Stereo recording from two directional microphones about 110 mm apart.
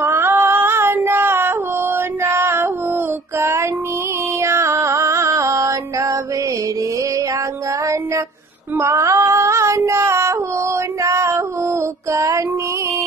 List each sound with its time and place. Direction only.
0.0 s music: 20° right (ahead or behind)
3.3 s female singing: 25° right (ahead or behind)
4.4 s music: 25° right (ahead or behind)
7.8 s music: 25° right (ahead or behind)
8.7 s female singing: 25° right (ahead or behind)